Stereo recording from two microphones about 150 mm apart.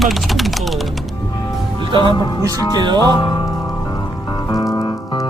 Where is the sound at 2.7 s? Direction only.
30° right (ahead or behind).